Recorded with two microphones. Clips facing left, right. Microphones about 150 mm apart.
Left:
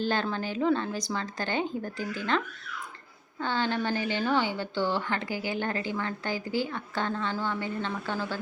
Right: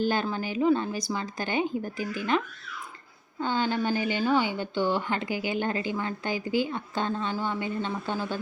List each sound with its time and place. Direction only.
0.0 s a woman's voice: 10° right (ahead or behind)
3.4 s a woman's voice: 15° right (ahead or behind)